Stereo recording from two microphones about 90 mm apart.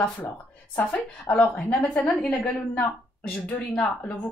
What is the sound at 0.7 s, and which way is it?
A woman's voice, 20° left (ahead or behind).